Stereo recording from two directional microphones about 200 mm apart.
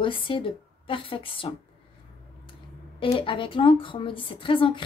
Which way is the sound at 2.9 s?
25° left (ahead or behind).